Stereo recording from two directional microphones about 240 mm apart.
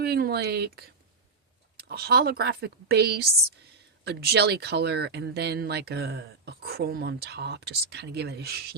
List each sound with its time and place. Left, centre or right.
0.0 s speech: right